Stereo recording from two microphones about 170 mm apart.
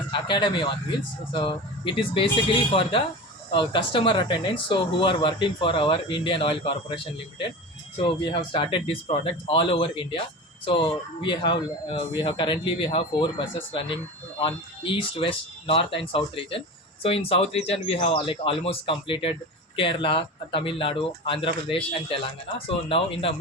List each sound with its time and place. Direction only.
0.1 s speech: 25° left (ahead or behind)
3.5 s a man's voice: 30° left (ahead or behind)